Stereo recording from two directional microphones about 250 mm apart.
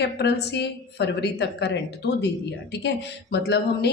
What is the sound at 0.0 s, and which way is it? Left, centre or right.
A woman's voice, left.